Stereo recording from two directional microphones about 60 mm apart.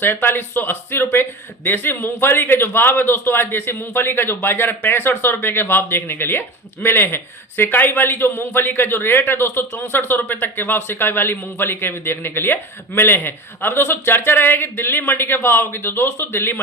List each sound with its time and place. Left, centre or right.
0.0 s a man's voice: left